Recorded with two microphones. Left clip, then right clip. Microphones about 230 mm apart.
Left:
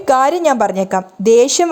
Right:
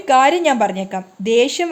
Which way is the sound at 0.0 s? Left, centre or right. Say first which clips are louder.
Left 1 dB; left.